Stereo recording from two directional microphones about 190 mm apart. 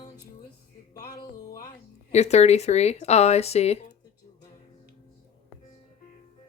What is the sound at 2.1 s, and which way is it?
Speech, 35° left (ahead or behind).